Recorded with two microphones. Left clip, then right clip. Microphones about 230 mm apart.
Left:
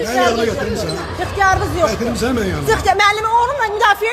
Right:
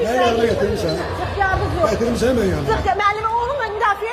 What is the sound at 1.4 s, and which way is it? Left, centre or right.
Speech, left.